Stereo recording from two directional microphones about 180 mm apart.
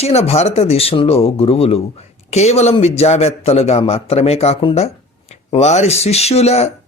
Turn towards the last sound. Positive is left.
turn(degrees=35)  # may be behind; listen again after turning